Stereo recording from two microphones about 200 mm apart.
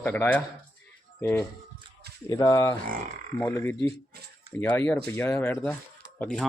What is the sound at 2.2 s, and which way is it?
A man's voice, 15° left (ahead or behind).